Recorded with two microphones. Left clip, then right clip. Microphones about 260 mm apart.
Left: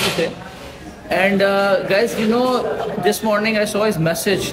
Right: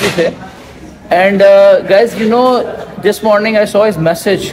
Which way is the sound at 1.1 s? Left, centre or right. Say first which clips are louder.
Right 10 dB; centre.